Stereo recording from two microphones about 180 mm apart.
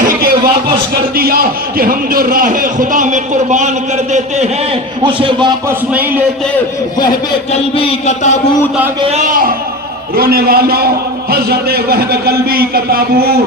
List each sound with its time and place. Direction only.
0.1 s a sound: 55° right (ahead or behind)
1.1 s a man's voice: 55° right (ahead or behind)
5.0 s a man's voice: 30° right (ahead or behind)
5.6 s speech: 10° right (ahead or behind)
7.5 s a sound: 35° left (ahead or behind)
9.0 s a man's voice: 35° right (ahead or behind)
10.2 s a man's voice: 60° right (ahead or behind)